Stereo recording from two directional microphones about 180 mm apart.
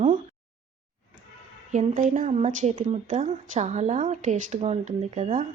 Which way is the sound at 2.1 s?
40° right (ahead or behind).